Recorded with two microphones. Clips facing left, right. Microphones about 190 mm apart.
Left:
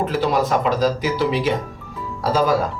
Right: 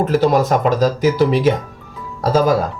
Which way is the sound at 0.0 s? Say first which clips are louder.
Right 5 dB; 45° right (ahead or behind).